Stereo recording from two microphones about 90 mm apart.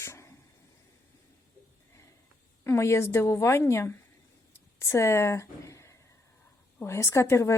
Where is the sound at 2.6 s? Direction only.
30° left (ahead or behind).